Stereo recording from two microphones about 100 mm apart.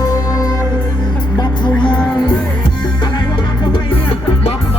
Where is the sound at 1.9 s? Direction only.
15° left (ahead or behind).